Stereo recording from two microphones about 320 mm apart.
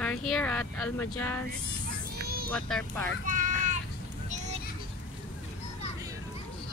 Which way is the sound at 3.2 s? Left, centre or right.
Right.